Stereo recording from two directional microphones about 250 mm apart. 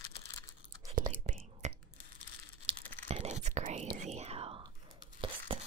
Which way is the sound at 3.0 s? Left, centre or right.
Right.